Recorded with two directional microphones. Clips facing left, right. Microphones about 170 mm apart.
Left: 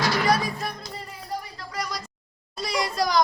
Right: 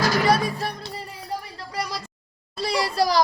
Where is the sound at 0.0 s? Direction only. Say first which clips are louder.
Right 3 dB; 35° right (ahead or behind).